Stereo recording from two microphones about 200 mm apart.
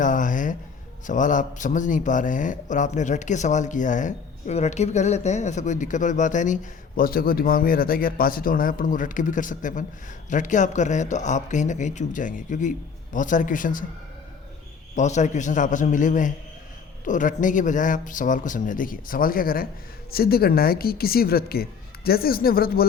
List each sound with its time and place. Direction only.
0.0 s a sound: 40° left (ahead or behind)
1.0 s a man's voice: 40° left (ahead or behind)
14.9 s a man's voice: 35° left (ahead or behind)